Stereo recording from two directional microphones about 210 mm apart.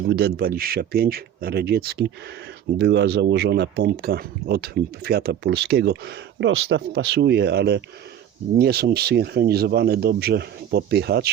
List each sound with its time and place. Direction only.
0.1 s speech: 50° right (ahead or behind)